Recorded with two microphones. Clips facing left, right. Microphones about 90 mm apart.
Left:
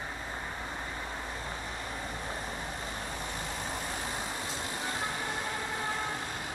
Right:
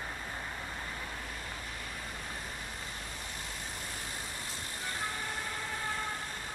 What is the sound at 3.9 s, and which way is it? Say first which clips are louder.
Vehicle: left 6 dB; 90° left.